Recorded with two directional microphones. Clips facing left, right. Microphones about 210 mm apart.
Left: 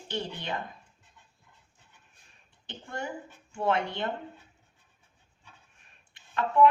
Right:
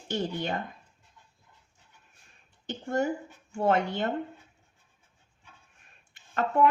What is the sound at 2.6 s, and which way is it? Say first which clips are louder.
A woman's voice: right 9 dB; 45° right (ahead or behind).